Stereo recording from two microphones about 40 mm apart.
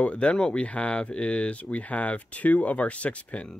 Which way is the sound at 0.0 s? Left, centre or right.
Left.